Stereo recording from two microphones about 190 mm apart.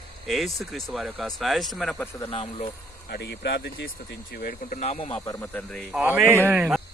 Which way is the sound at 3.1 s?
60° left (ahead or behind).